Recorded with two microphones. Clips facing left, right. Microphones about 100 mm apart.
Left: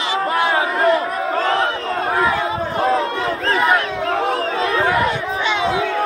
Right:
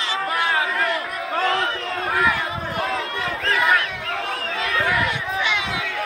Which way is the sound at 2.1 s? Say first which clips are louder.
Left 3 dB; 30° left (ahead or behind).